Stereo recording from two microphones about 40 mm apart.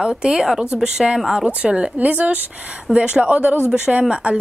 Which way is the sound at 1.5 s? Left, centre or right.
Right.